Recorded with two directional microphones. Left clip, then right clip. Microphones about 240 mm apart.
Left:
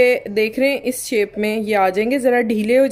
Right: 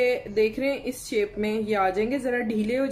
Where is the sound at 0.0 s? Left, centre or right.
Left.